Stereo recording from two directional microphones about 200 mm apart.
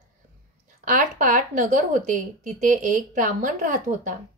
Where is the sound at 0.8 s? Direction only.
40° right (ahead or behind).